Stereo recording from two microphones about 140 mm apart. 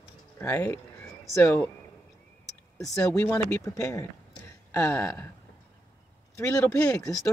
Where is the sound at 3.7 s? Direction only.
25° left (ahead or behind).